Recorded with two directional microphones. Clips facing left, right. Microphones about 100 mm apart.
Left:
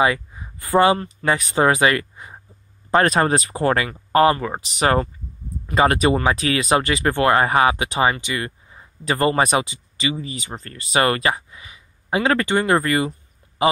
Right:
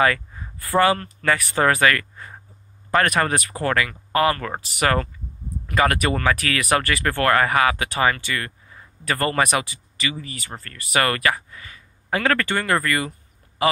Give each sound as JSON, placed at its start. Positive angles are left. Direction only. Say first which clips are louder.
{"t": 0.0, "sound": "speech", "louder": "left 1 dB", "side_deg": 15}
{"t": 4.4, "sound": "speech", "louder": "left 2 dB", "side_deg": 15}